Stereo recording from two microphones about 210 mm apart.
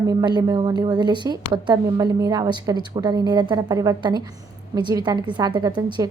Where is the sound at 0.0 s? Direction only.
15° right (ahead or behind).